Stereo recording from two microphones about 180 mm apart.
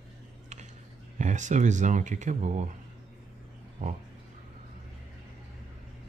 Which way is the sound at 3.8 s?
40° right (ahead or behind).